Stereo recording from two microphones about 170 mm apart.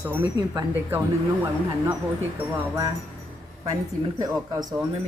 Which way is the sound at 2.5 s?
15° right (ahead or behind).